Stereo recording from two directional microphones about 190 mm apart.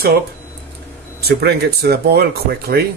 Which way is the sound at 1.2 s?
60° right (ahead or behind).